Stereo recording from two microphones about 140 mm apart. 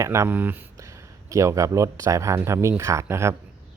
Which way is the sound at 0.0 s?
20° right (ahead or behind).